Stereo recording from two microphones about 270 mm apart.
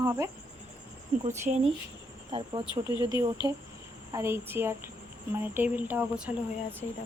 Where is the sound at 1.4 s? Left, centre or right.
Right.